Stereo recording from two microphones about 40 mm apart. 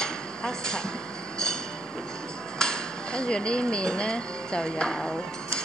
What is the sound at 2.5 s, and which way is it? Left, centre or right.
Speech, centre.